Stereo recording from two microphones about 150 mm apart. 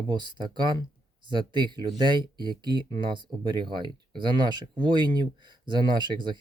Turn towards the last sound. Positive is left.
turn(degrees=-30)  # may be behind; listen again after turning